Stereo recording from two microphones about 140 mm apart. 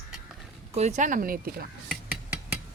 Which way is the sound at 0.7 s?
55° right (ahead or behind).